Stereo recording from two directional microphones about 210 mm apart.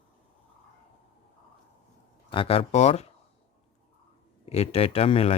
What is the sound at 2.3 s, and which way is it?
Speech, 25° left (ahead or behind).